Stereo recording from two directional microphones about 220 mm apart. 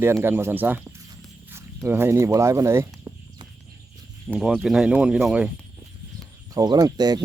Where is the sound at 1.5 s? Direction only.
10° right (ahead or behind).